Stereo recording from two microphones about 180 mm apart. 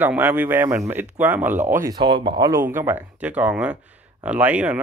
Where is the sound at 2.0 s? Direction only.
30° right (ahead or behind); by 4.8 s 5° right (ahead or behind).